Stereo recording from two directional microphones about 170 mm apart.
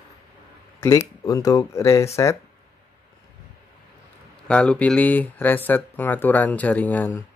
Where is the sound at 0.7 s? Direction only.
20° left (ahead or behind).